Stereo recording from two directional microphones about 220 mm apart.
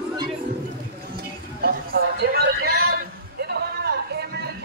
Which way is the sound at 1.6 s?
45° right (ahead or behind).